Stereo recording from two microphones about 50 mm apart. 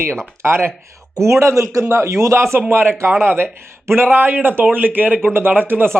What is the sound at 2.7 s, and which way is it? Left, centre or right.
Speech, right.